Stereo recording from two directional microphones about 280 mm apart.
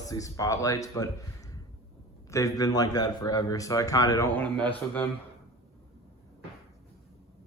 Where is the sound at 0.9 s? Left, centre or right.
Centre.